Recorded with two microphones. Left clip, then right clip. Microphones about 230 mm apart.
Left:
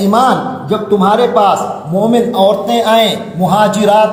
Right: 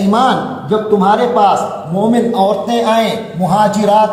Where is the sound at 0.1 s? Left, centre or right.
Left.